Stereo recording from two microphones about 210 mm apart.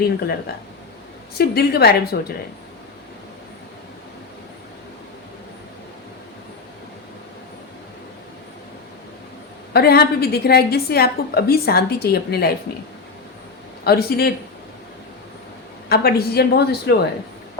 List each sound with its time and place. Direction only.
1.4 s a woman's voice: 50° left (ahead or behind)
9.7 s a woman's voice: 50° left (ahead or behind)
13.8 s a woman's voice: 45° left (ahead or behind)
15.9 s a woman's voice: 45° left (ahead or behind)